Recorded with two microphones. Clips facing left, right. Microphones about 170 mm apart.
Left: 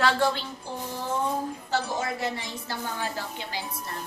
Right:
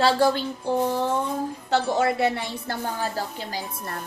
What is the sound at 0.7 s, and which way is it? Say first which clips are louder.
Music: right 14 dB; 60° right (ahead or behind).